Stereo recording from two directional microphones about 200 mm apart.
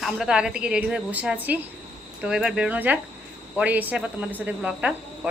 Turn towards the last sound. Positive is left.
turn(degrees=-5)  # may be behind; listen again after turning